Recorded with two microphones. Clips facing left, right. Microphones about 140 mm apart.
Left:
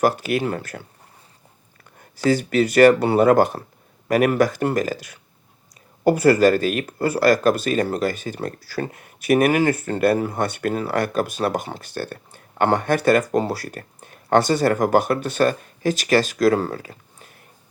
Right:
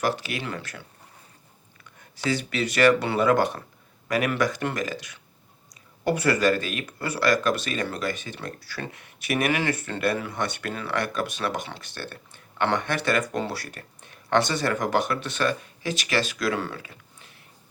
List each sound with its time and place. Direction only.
0.0 s speech: 45° left (ahead or behind)